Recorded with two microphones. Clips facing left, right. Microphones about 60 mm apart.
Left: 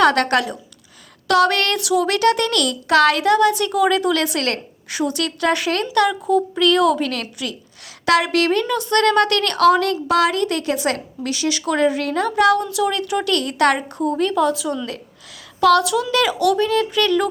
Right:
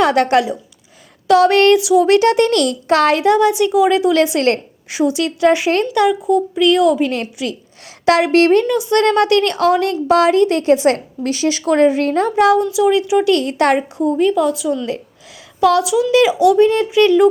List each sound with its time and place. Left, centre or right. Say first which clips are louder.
0.0 s speech: right 3 dB; centre
1.7 s speech: right 7 dB; centre
2.0 s speech: right 6 dB; right; by 7.0 s centre
7.0 s speech: right 5 dB; right
8.7 s speech: right 2 dB; centre
10.1 s speech: right 7 dB; right
12.7 s speech: right 7 dB; centre
13.3 s speech: right 3 dB; right
14.2 s speech: right 3 dB; centre